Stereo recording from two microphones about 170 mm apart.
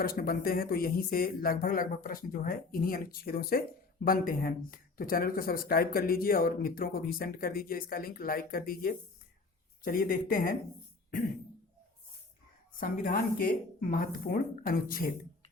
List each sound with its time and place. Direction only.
0.0 s speech: 60° left (ahead or behind)
12.8 s speech: 55° left (ahead or behind)